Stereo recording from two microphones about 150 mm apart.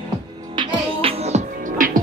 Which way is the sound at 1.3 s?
50° right (ahead or behind).